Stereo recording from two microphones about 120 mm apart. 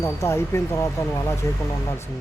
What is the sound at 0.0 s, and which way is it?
Speech, 25° left (ahead or behind).